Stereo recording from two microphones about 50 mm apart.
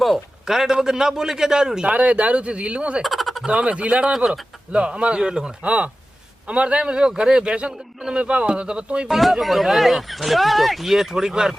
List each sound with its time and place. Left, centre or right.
0.4 s a man's voice: centre
1.9 s speech: right
3.0 s frog: centre
3.4 s speech: right
9.0 s speech: centre